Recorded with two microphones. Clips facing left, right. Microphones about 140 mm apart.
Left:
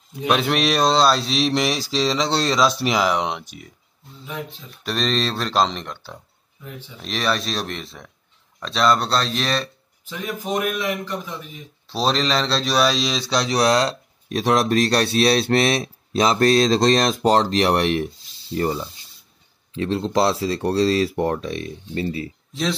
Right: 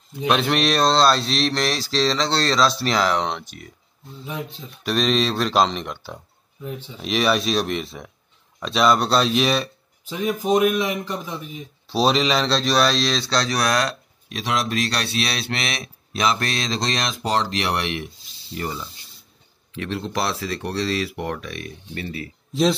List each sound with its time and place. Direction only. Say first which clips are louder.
0.1 s speech: even; 5° left (ahead or behind)
4.3 s speech: right 1 dB; 20° right (ahead or behind)
4.8 s speech: right 2 dB; 5° right (ahead or behind)
11.9 s speech: right 2 dB; 5° right (ahead or behind); by 13.9 s 25° left (ahead or behind)
14.3 s a man's voice: left 6 dB; 45° left (ahead or behind); by 22.3 s 30° left (ahead or behind)
22.5 s speech: right 6 dB; 15° right (ahead or behind)